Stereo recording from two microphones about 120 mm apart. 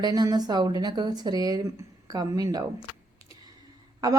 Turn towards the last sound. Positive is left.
turn(degrees=-30)  # may be behind; listen again after turning